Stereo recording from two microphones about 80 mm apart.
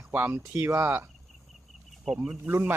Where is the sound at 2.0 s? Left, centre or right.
Centre.